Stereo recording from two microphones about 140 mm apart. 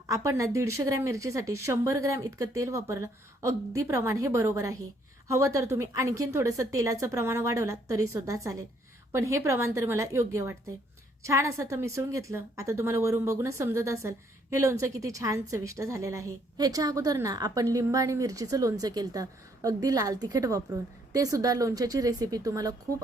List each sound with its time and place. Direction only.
0.1 s a woman's voice: 25° right (ahead or behind)